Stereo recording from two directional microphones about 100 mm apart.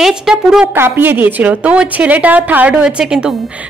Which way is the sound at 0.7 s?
20° right (ahead or behind).